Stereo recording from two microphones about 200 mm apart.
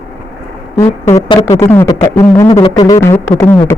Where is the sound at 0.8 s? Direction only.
15° left (ahead or behind).